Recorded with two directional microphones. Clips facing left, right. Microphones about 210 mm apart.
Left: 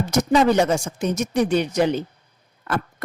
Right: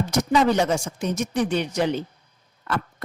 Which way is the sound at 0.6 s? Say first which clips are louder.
Left 3 dB; 45° left (ahead or behind).